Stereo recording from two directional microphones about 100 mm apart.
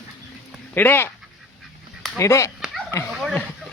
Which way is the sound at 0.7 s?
20° left (ahead or behind).